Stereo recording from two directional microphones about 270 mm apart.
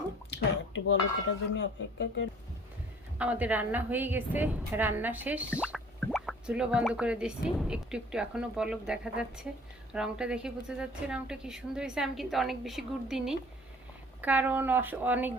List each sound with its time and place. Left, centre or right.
0.3 s speech: left
3.2 s a woman's voice: centre